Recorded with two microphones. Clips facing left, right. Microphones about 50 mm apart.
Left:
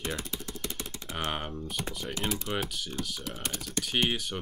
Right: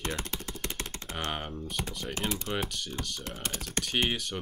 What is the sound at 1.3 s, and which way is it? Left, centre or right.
Speech, centre.